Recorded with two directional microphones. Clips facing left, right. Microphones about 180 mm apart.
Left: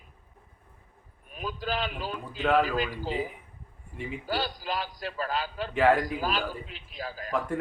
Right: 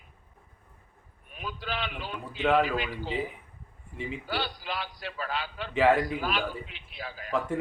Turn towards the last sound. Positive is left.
turn(degrees=40)  # may be behind; listen again after turning